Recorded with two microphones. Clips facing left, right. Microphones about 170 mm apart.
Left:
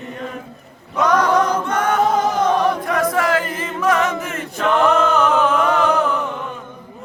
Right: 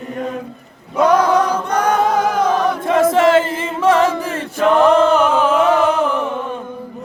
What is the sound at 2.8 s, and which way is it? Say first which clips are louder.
Chant: right 6 dB; 25° right (ahead or behind).